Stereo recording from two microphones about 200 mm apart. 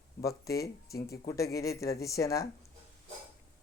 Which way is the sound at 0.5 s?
50° left (ahead or behind).